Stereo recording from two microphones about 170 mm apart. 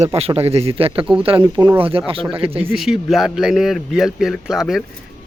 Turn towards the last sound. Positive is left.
turn(degrees=0)  # may be behind; listen again after turning